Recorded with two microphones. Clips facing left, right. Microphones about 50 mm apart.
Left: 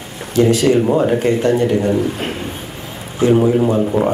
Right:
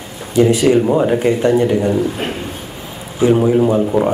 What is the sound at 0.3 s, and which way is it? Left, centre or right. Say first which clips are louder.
Speech: right 1 dB; centre.